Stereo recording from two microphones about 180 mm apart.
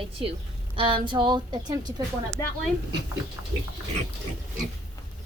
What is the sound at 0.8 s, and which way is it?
A woman's voice, 30° right (ahead or behind).